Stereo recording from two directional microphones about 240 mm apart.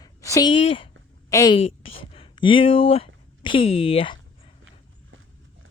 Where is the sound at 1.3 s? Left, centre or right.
Centre.